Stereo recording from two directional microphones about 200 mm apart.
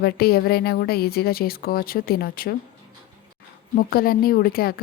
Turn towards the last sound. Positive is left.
turn(degrees=50)  # may be behind; listen again after turning